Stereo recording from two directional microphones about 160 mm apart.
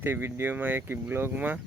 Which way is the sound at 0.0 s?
15° right (ahead or behind).